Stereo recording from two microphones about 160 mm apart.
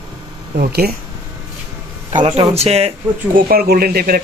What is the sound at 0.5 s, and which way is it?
Speech, 70° right (ahead or behind).